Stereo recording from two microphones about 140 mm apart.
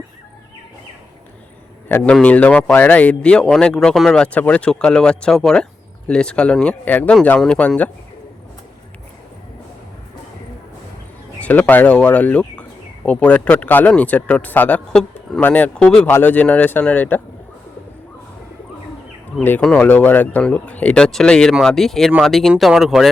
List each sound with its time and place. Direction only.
1.9 s speech: 15° left (ahead or behind)
11.3 s speech: 10° left (ahead or behind)
19.4 s speech: 10° left (ahead or behind)